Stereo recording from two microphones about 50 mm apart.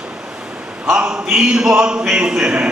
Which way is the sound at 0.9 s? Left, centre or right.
Centre.